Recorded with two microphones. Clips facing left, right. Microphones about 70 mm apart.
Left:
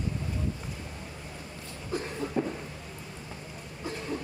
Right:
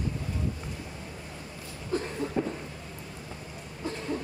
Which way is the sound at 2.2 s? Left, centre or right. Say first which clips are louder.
Right 1 dB; centre.